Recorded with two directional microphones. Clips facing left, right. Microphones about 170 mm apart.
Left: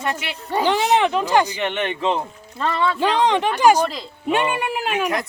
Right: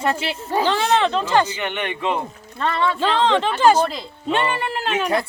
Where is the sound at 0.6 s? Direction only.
15° left (ahead or behind).